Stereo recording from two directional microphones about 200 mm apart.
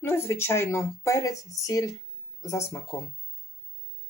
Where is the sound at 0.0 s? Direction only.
15° left (ahead or behind).